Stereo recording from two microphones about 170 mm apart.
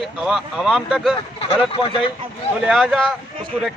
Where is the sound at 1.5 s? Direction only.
30° left (ahead or behind).